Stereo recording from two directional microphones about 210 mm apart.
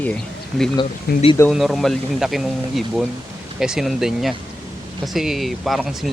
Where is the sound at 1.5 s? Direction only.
Centre (ahead or behind).